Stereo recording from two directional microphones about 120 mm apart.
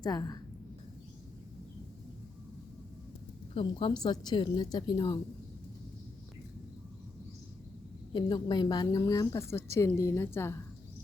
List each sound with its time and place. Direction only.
0.0 s a woman's voice: 35° left (ahead or behind)
3.5 s a woman's voice: 45° left (ahead or behind)
8.1 s a woman's voice: 35° left (ahead or behind); by 10.6 s 20° left (ahead or behind)